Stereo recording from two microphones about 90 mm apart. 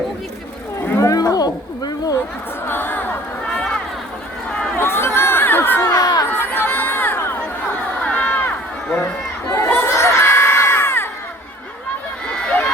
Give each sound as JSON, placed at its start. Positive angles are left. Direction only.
{"t": 0.9, "sound": "a sound", "side_deg": 35}
{"t": 2.6, "sound": "a sound", "side_deg": 25}
{"t": 4.4, "sound": "run", "side_deg": 10}
{"t": 4.8, "sound": "crowd", "side_deg": 25}
{"t": 5.8, "sound": "a sound", "side_deg": 45}
{"t": 6.3, "sound": "crowd", "side_deg": 25}
{"t": 8.0, "sound": "run", "side_deg": 15}
{"t": 9.7, "sound": "crowd", "side_deg": 30}
{"t": 12.4, "sound": "run", "side_deg": 10}